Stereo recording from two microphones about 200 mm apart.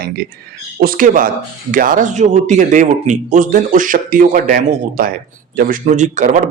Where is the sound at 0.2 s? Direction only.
50° right (ahead or behind).